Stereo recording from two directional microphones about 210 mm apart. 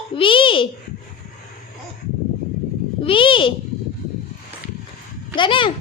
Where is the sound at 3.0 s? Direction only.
25° left (ahead or behind).